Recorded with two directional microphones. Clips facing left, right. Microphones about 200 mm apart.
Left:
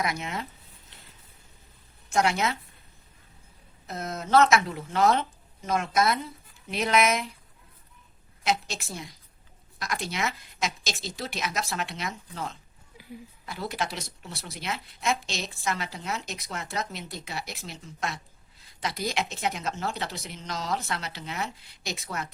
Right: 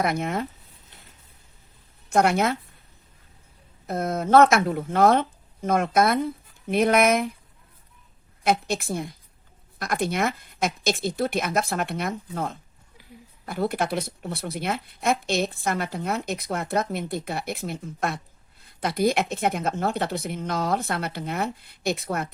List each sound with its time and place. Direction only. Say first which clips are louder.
0.0 s speech: right 6 dB; 55° right (ahead or behind)
2.0 s speech: right 5 dB; 55° right (ahead or behind)
3.8 s speech: right 8 dB; 55° right (ahead or behind)
8.4 s speech: right 5 dB; 55° right (ahead or behind)